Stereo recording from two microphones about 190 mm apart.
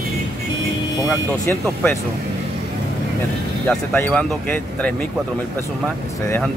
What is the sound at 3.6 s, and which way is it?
Speech, 5° left (ahead or behind).